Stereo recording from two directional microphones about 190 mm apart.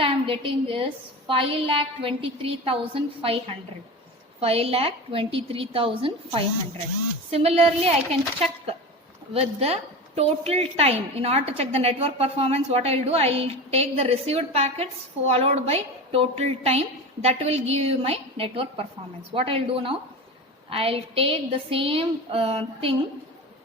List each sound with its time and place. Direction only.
0.0 s a woman's voice: 30° right (ahead or behind)